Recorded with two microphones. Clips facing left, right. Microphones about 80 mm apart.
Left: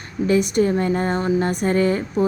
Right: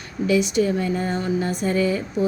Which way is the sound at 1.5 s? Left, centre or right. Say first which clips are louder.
Left 3 dB; left.